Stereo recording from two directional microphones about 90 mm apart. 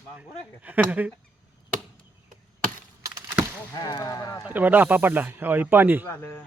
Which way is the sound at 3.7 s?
45° left (ahead or behind).